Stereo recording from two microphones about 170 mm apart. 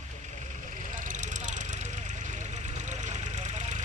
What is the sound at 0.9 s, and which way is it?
Vehicle, 50° right (ahead or behind).